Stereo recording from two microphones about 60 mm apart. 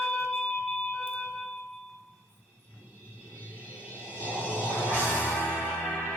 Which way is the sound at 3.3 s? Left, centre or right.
Left.